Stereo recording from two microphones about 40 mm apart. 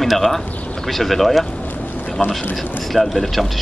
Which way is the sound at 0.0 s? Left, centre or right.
Centre.